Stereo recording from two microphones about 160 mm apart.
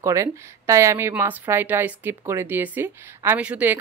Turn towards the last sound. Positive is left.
turn(degrees=-10)  # may be behind; listen again after turning